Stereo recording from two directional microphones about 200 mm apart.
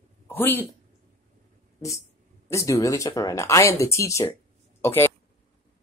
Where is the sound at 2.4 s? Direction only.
15° left (ahead or behind).